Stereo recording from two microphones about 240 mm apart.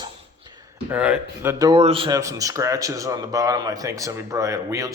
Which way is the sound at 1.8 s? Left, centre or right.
Right.